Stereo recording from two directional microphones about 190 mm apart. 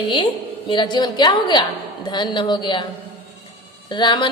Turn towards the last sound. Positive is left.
turn(degrees=25)  # may be behind; listen again after turning